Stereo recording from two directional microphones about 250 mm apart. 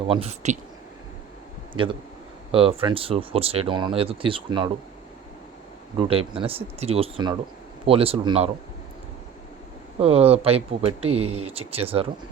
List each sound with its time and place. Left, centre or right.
0.1 s speech: right
1.7 s speech: centre
6.0 s speech: right
10.0 s speech: right